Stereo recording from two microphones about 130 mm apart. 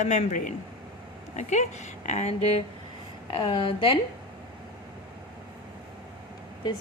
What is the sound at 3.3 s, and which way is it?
Speech, 40° left (ahead or behind).